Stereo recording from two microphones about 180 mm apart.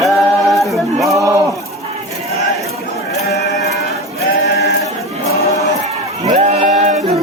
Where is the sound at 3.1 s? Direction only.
65° left (ahead or behind).